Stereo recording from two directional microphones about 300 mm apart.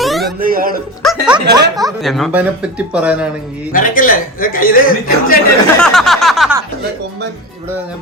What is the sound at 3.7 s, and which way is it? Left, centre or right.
A man's voice, left.